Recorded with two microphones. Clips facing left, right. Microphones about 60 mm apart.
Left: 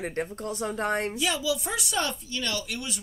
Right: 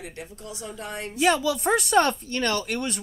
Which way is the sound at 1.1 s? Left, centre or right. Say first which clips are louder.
Right 6 dB; right.